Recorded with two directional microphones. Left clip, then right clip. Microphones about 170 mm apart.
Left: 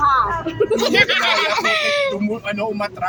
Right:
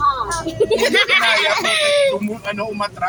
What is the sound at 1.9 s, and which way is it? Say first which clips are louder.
Speech: right 3 dB; 15° left (ahead or behind).